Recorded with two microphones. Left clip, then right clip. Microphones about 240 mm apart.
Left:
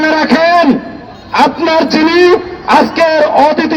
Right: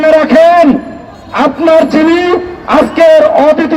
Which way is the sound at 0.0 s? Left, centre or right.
Left.